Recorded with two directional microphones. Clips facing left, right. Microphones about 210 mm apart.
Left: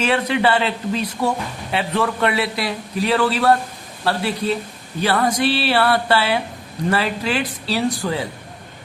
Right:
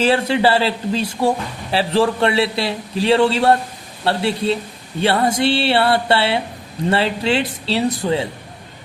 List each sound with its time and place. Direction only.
0.0 s a man's voice: 30° right (ahead or behind)